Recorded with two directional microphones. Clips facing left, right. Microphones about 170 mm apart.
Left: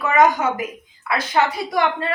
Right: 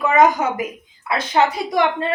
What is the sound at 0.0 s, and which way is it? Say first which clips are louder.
A woman's voice: right 1 dB; 20° right (ahead or behind).